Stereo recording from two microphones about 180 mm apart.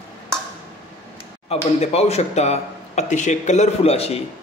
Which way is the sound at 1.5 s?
35° left (ahead or behind).